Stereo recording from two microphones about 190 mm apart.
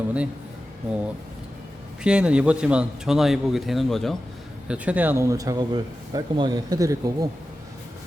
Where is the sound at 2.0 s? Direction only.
5° right (ahead or behind).